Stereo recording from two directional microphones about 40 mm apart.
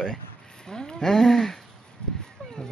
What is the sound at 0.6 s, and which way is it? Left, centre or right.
Speech, centre.